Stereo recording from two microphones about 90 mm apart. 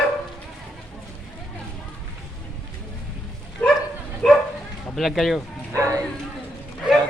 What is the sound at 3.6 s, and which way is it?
Bow-wow, 15° left (ahead or behind).